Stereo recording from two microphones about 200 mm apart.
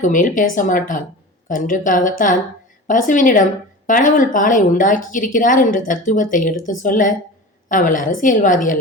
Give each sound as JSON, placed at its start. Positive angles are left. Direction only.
{"t": 0.0, "sound": "a woman's voice", "side_deg": 40}